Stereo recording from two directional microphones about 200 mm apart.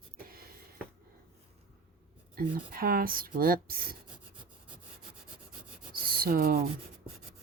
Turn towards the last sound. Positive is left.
turn(degrees=-45)  # may be behind; listen again after turning